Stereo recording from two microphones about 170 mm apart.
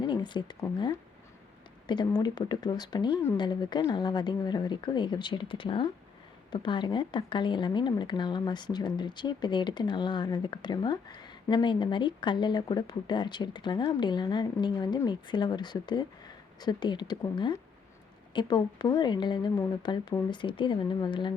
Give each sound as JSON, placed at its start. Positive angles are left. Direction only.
{"t": 0.0, "sound": "speech", "side_deg": 25}
{"t": 1.9, "sound": "a woman's voice", "side_deg": 25}